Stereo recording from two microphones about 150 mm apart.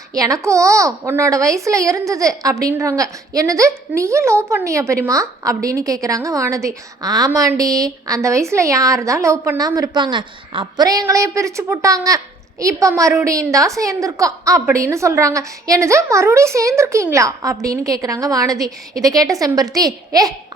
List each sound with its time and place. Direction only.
0.1 s a woman's voice: 25° right (ahead or behind)